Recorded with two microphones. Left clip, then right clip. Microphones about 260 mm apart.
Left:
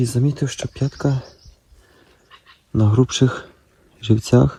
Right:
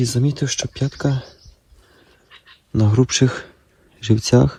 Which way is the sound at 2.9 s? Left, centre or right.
Right.